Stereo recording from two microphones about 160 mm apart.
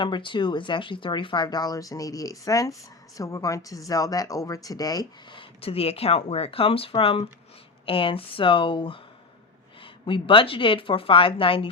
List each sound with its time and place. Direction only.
0.0 s speech: 30° left (ahead or behind)